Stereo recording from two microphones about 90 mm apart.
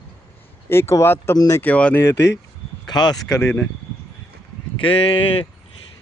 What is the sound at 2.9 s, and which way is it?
Speech, 50° left (ahead or behind).